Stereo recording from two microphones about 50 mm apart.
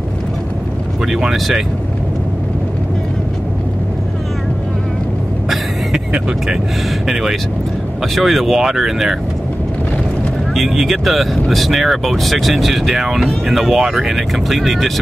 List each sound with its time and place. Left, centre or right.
7.1 s speech: centre
10.5 s speech: centre